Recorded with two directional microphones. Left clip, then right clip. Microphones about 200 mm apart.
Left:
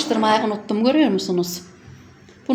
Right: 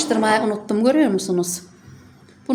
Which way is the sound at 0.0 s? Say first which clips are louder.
Even; 10° right (ahead or behind).